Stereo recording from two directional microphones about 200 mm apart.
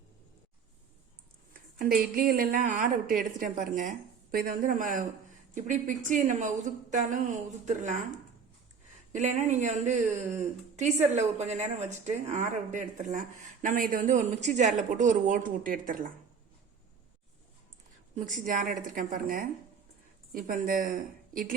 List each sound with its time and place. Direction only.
1.8 s a woman's voice: 45° right (ahead or behind)
9.1 s speech: 40° right (ahead or behind)
18.4 s a woman's voice: 40° right (ahead or behind)